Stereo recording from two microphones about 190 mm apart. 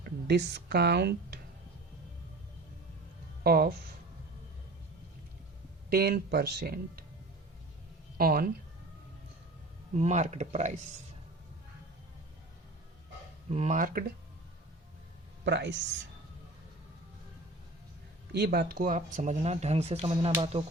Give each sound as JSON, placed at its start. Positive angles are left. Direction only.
{"t": 0.0, "sound": "speech", "side_deg": -65}
{"t": 3.4, "sound": "speech", "side_deg": -50}
{"t": 5.9, "sound": "speech", "side_deg": -55}
{"t": 8.2, "sound": "speech", "side_deg": -50}
{"t": 10.0, "sound": "speech", "side_deg": -40}
{"t": 13.5, "sound": "speech", "side_deg": -35}
{"t": 15.4, "sound": "speech", "side_deg": -70}
{"t": 18.3, "sound": "speech", "side_deg": -60}